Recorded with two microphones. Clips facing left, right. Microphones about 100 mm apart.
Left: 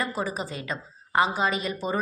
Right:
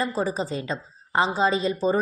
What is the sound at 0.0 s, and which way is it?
A woman's voice, 30° right (ahead or behind).